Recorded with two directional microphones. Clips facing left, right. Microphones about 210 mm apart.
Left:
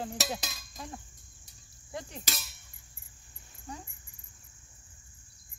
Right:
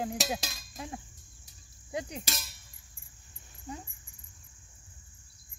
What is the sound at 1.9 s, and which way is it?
Insect, 15° right (ahead or behind).